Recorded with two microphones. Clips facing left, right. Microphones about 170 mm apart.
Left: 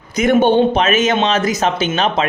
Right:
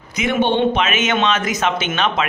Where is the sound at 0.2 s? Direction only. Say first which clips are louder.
Left 5 dB; 45° left (ahead or behind).